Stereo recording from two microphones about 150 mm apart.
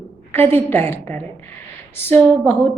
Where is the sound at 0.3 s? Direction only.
15° left (ahead or behind).